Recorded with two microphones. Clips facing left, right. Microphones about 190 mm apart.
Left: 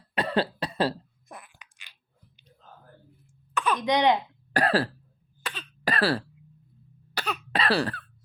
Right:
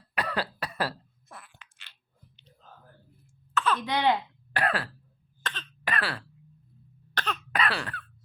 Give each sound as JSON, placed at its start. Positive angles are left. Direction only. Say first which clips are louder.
{"t": 0.1, "sound": "cough", "louder": "left 5 dB", "side_deg": 25}
{"t": 3.5, "sound": "speech", "louder": "left 3 dB", "side_deg": 15}
{"t": 4.5, "sound": "cough", "louder": "left 5 dB", "side_deg": 35}
{"t": 5.4, "sound": "cough", "louder": "left 1 dB", "side_deg": 10}
{"t": 5.8, "sound": "throat clearing", "louder": "left 7 dB", "side_deg": 35}
{"t": 7.1, "sound": "cough", "louder": "left 1 dB", "side_deg": 10}
{"t": 7.5, "sound": "cough", "louder": "left 6 dB", "side_deg": 35}